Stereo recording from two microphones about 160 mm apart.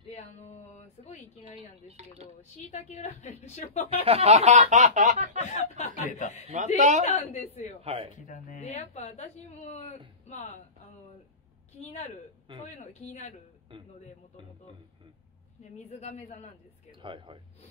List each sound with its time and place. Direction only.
0.1 s a sound: 45° left (ahead or behind)
2.2 s a woman's voice: 45° left (ahead or behind)
4.0 s speech: 40° right (ahead or behind)
5.5 s a woman's voice: 50° left (ahead or behind)
6.4 s speech: 50° right (ahead or behind)
7.1 s a woman's voice: 40° left (ahead or behind)
7.8 s speech: 40° right (ahead or behind)
8.3 s a woman's voice: 50° left (ahead or behind)
11.9 s a woman's voice: 45° left (ahead or behind)
15.6 s a woman's voice: 45° left (ahead or behind)
17.0 s speech: 30° right (ahead or behind)